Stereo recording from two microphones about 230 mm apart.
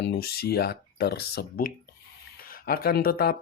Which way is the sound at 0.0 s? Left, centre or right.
Left.